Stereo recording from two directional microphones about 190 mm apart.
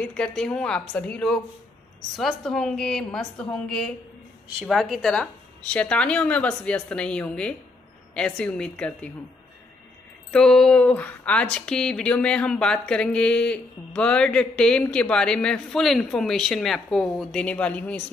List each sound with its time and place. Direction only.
0.0 s a woman's voice: 5° left (ahead or behind)
10.3 s a woman's voice: 5° left (ahead or behind)